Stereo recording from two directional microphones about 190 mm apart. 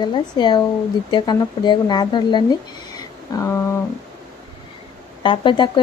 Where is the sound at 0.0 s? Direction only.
25° left (ahead or behind).